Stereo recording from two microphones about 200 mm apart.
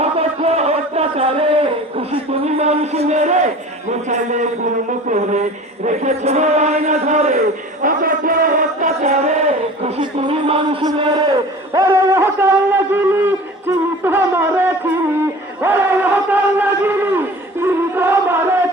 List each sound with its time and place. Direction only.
0.0 s a sound: 30° right (ahead or behind)
4.1 s a man's voice: 35° right (ahead or behind)
4.9 s music: 35° right (ahead or behind); by 18.5 s 10° right (ahead or behind)